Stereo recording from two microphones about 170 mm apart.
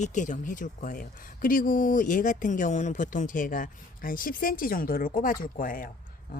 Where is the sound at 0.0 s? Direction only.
45° left (ahead or behind).